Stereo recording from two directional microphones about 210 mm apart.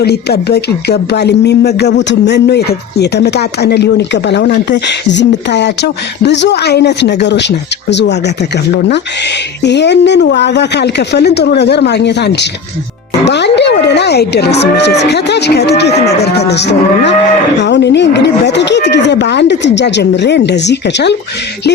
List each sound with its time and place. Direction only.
0.0 s speech: 50° left (ahead or behind)